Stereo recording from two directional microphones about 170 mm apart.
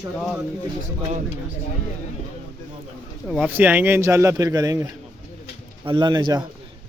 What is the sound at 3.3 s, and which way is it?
A man's voice, 10° right (ahead or behind).